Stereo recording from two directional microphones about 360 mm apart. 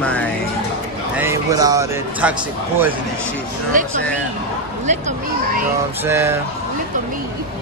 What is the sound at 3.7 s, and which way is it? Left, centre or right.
Speech, right.